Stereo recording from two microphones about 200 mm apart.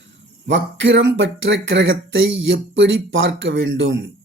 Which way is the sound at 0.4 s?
65° right (ahead or behind).